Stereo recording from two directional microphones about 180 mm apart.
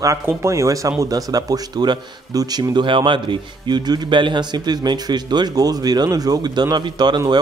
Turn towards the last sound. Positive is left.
turn(degrees=-25)  # may be behind; listen again after turning